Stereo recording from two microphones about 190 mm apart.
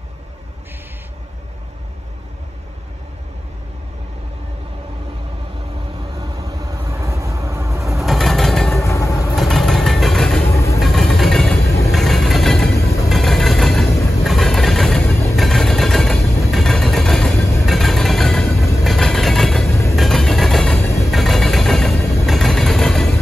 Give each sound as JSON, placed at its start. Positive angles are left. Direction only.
{"t": 6.1, "sound": "vehicle", "side_deg": -15}
{"t": 8.0, "sound": "train", "side_deg": 0}
{"t": 8.8, "sound": "train", "side_deg": 15}
{"t": 9.3, "sound": "vehicle", "side_deg": 0}
{"t": 10.5, "sound": "vehicle", "side_deg": 15}
{"t": 10.8, "sound": "vehicle", "side_deg": 0}